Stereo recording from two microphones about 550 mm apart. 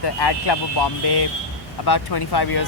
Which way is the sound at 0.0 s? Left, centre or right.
Left.